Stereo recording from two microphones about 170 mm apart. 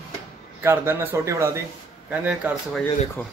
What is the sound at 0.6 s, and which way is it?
Speech, 15° right (ahead or behind).